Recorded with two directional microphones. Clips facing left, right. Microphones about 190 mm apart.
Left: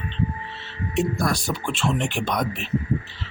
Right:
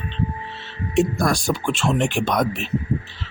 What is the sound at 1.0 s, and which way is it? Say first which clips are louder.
Speech: right 4 dB; 90° right.